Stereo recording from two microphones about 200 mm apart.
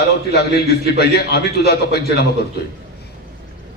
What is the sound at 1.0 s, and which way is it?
Speech, 55° left (ahead or behind).